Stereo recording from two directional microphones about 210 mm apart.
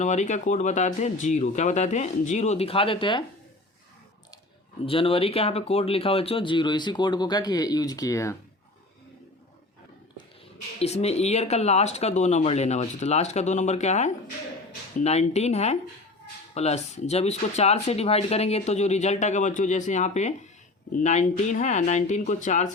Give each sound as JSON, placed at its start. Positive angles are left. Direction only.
{"t": 0.0, "sound": "speech", "side_deg": 35}
{"t": 4.9, "sound": "speech", "side_deg": 25}
{"t": 10.8, "sound": "speech", "side_deg": 30}